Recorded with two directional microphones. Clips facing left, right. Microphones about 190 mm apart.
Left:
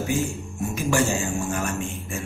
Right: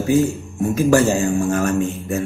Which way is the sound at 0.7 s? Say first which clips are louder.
Right 8 dB; 45° right (ahead or behind).